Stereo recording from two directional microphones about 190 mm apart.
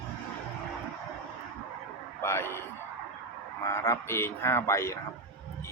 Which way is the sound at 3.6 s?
15° left (ahead or behind).